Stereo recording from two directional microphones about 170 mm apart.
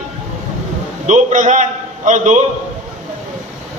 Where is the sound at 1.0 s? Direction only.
45° right (ahead or behind).